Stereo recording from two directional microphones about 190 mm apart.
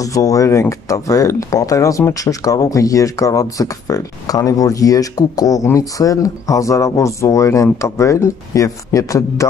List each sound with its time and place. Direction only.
0.0 s speech: 15° left (ahead or behind)